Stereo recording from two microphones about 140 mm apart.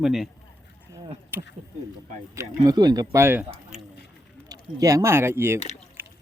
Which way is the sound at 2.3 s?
25° right (ahead or behind).